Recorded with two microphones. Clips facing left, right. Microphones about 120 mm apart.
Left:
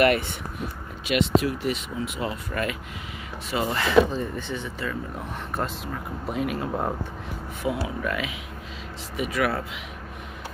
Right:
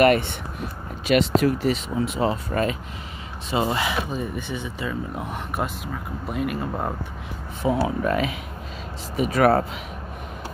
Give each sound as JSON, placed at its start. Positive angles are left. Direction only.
{"t": 0.0, "sound": "speech", "side_deg": -35}
{"t": 6.2, "sound": "speech", "side_deg": 0}
{"t": 7.6, "sound": "speech", "side_deg": -35}